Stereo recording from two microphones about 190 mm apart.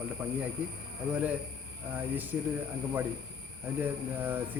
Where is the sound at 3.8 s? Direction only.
10° right (ahead or behind).